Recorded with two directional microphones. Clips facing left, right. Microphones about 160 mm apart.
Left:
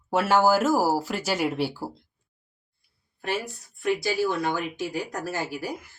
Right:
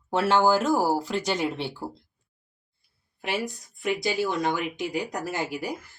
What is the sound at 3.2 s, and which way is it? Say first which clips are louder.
Speech: even; 15° right (ahead or behind).